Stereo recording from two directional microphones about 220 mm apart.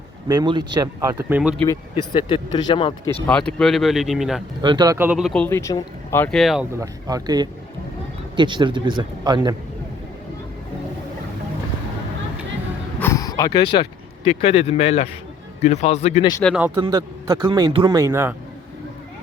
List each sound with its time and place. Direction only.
0.3 s speech: 20° right (ahead or behind); by 1.6 s 5° right (ahead or behind)
1.6 s speech: 15° left (ahead or behind)
3.2 s speech: 5° left (ahead or behind)
4.6 s speech: 20° right (ahead or behind); by 6.7 s centre (ahead or behind)
6.7 s speech: 15° right (ahead or behind)
13.0 s a sound: 15° left (ahead or behind)
14.3 s speech: 25° left (ahead or behind)
16.6 s speech: 10° right (ahead or behind)